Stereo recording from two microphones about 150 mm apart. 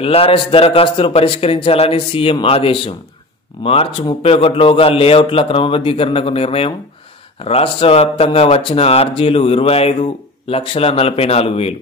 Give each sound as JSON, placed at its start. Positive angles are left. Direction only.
{"t": 0.0, "sound": "a man's voice", "side_deg": 40}